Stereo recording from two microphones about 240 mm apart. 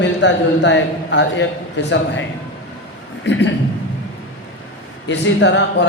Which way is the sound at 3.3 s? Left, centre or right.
Left.